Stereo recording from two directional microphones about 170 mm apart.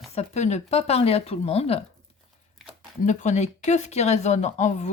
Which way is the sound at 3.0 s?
45° left (ahead or behind).